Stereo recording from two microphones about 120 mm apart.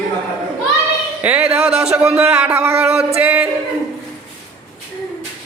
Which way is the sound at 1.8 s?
5° right (ahead or behind).